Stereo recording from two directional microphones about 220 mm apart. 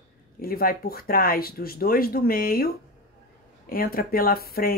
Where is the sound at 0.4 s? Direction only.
40° left (ahead or behind).